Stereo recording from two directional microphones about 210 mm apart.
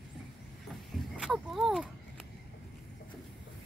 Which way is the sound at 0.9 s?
Centre (ahead or behind).